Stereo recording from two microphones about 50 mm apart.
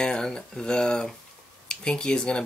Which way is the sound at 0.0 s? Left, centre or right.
Centre.